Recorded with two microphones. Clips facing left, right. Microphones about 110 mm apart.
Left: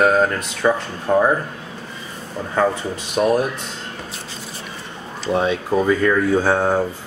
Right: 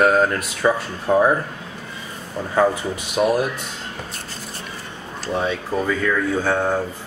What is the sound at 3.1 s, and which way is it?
Speech, 5° right (ahead or behind).